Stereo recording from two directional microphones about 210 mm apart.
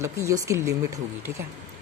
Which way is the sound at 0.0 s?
15° right (ahead or behind).